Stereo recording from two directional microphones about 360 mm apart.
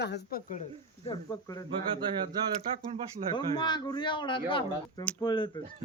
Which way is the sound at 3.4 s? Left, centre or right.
Centre.